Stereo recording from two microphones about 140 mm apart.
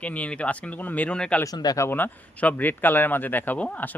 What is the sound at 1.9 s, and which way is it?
Speech, 15° left (ahead or behind).